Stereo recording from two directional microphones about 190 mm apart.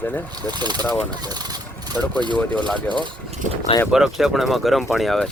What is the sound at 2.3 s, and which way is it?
Speech, 5° left (ahead or behind).